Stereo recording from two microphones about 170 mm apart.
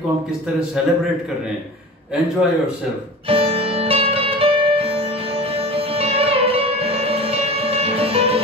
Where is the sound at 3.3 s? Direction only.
35° right (ahead or behind).